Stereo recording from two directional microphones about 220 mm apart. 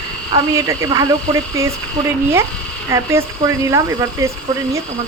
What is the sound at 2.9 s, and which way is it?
Speech, 15° right (ahead or behind).